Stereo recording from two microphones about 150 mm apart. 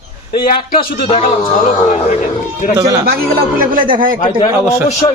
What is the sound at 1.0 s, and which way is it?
Speech, 45° left (ahead or behind).